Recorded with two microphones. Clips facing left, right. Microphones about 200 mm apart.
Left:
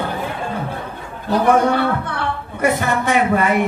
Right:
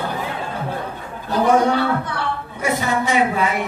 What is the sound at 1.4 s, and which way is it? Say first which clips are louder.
A man's voice: left 1 dB; 55° left (ahead or behind).